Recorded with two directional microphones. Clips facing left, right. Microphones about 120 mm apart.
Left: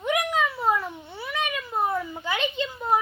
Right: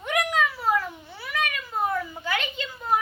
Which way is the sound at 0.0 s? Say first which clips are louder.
Left 1 dB; 20° left (ahead or behind).